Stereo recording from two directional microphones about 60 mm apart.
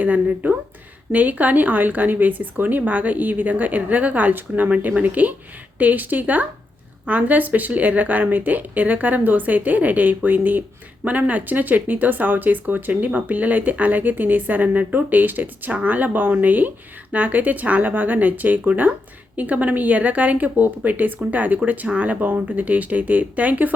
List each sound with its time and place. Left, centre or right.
0.0 s speech: right